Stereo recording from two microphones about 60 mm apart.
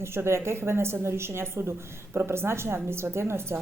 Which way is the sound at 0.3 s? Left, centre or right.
Right.